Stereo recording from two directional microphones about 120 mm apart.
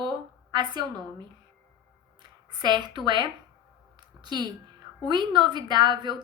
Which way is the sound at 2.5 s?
40° right (ahead or behind).